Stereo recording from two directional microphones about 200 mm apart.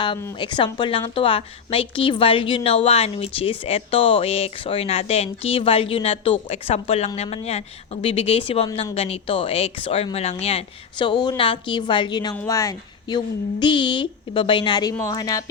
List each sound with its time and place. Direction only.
0.0 s a woman's voice: 25° left (ahead or behind)